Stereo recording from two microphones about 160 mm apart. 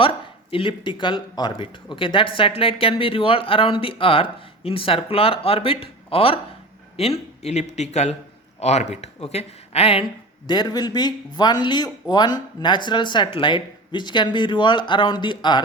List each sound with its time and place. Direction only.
0.0 s speech: 35° left (ahead or behind)